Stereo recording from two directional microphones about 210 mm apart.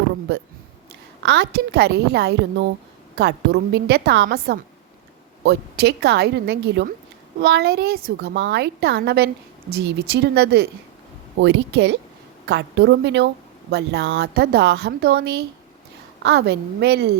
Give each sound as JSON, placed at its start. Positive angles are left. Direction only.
{"t": 1.2, "sound": "a woman's voice", "side_deg": -55}